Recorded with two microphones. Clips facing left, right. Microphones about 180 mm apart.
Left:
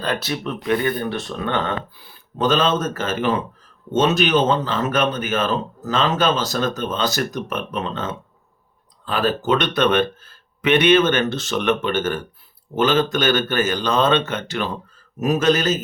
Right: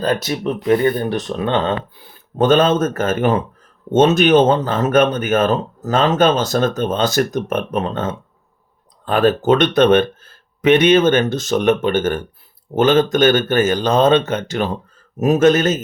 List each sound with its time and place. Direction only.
0.0 s speech: 40° right (ahead or behind)
2.4 s speech: 50° right (ahead or behind)